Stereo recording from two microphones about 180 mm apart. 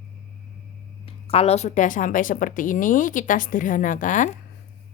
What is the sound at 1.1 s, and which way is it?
Speech, 30° left (ahead or behind).